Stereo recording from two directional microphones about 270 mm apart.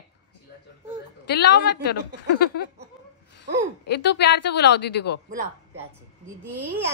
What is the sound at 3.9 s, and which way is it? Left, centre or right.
A woman's voice, left.